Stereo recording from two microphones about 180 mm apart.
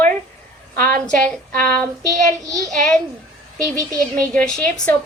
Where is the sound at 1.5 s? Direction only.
5° left (ahead or behind).